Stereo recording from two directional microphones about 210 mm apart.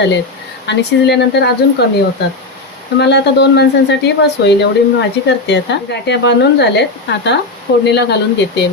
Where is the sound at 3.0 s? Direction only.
55° left (ahead or behind).